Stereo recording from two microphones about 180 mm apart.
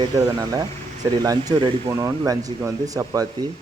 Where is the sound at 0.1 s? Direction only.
20° right (ahead or behind).